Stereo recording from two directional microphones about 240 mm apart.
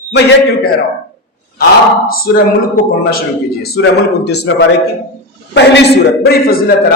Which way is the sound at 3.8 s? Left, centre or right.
Left.